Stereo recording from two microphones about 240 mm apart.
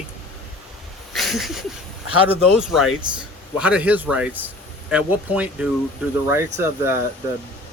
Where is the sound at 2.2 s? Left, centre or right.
Centre.